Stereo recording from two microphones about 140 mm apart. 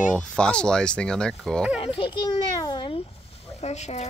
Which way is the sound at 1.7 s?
40° left (ahead or behind).